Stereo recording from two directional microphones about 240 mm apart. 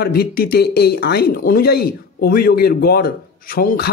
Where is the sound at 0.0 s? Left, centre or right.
Left.